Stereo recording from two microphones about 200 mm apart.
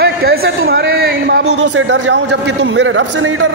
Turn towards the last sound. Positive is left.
turn(degrees=-70)  # may be behind; listen again after turning